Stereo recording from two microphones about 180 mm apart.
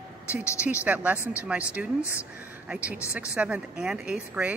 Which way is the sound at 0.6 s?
10° right (ahead or behind).